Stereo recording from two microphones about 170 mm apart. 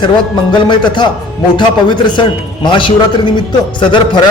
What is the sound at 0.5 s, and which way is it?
Speech, 25° left (ahead or behind).